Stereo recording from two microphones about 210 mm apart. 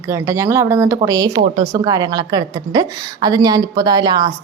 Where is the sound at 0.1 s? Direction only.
15° right (ahead or behind).